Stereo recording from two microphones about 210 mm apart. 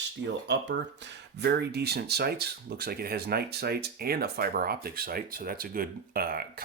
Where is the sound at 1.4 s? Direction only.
50° right (ahead or behind).